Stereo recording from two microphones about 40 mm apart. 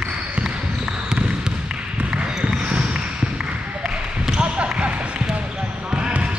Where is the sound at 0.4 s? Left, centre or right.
Centre.